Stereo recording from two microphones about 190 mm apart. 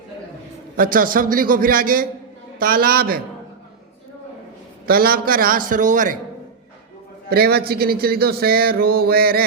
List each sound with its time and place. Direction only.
0.8 s speech: 45° right (ahead or behind)
4.9 s speech: 50° right (ahead or behind)
7.3 s speech: 55° right (ahead or behind)